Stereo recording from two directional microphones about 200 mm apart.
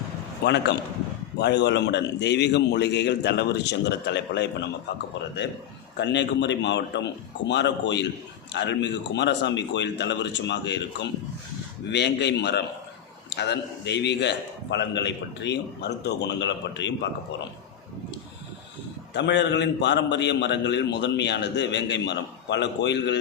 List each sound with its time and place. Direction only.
0.4 s a man's voice: 60° left (ahead or behind)
6.0 s a man's voice: 60° left (ahead or behind)
19.1 s a man's voice: 60° left (ahead or behind)